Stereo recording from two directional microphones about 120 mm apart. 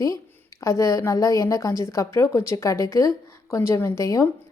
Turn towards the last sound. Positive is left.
turn(degrees=25)  # may be behind; listen again after turning